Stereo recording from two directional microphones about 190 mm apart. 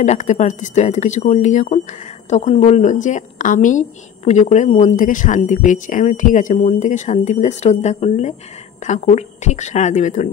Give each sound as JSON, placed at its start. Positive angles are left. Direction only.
{"t": 0.0, "sound": "a woman's voice", "side_deg": 40}